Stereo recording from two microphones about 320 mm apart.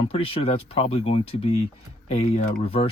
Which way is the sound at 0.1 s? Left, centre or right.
Centre.